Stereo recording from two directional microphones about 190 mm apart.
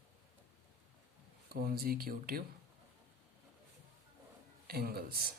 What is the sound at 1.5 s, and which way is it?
Speech, 50° right (ahead or behind).